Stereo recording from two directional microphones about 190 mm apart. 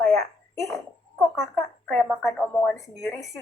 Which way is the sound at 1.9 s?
Centre (ahead or behind).